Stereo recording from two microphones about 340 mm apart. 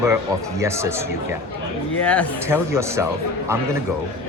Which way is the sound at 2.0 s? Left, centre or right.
Centre.